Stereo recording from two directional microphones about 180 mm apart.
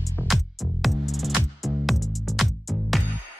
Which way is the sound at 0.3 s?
Centre (ahead or behind).